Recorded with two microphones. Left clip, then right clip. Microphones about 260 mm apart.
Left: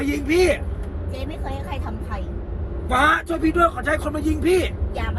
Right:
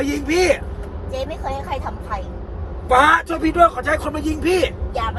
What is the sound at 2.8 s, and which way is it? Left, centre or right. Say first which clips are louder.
A man's voice: right 5 dB; right.